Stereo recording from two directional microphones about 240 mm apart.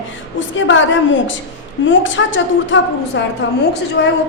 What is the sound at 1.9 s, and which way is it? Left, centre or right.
Speech, left.